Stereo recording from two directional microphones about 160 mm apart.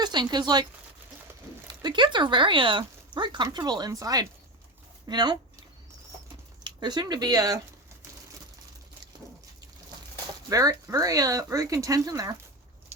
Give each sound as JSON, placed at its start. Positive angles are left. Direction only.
{"t": 0.0, "sound": "speech", "side_deg": -25}
{"t": 1.8, "sound": "speech", "side_deg": -30}
{"t": 5.0, "sound": "a sound", "side_deg": -25}
{"t": 6.7, "sound": "speech", "side_deg": -25}
{"t": 10.5, "sound": "speech", "side_deg": -20}